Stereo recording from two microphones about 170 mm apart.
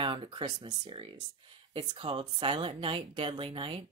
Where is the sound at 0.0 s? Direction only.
30° right (ahead or behind).